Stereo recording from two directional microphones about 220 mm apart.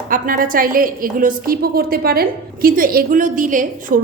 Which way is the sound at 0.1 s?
40° right (ahead or behind).